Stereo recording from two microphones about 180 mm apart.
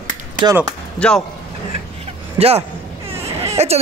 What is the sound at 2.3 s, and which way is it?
A man's voice, 35° right (ahead or behind).